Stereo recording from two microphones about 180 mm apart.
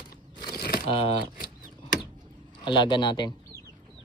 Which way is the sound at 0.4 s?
25° left (ahead or behind).